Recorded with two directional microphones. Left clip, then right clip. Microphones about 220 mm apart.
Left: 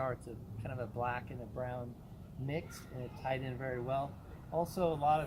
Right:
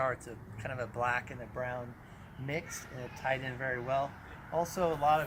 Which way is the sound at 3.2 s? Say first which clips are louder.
Right 5 dB; 10° right (ahead or behind).